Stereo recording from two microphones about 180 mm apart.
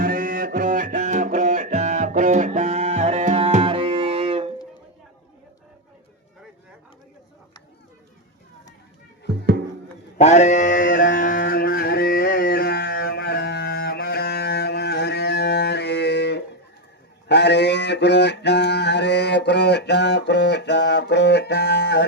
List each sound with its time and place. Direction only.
0.0 s music: 50° right (ahead or behind); by 4.5 s 30° right (ahead or behind)
10.2 s a sound: 40° left (ahead or behind); by 16.4 s 70° left (ahead or behind)
17.2 s mantra: 70° left (ahead or behind)